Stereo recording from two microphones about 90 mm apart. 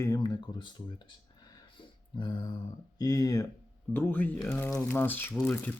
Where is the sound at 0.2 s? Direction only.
50° left (ahead or behind).